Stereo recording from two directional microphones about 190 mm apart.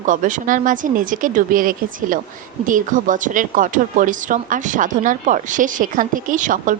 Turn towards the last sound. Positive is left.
turn(degrees=-45)  # may be behind; listen again after turning